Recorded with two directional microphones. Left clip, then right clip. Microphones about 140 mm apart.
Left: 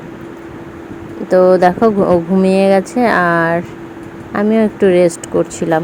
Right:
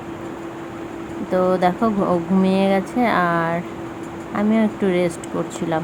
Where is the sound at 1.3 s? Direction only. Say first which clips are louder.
Left 9 dB; 45° left (ahead or behind).